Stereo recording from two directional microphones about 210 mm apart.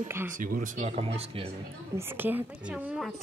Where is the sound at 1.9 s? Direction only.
10° right (ahead or behind).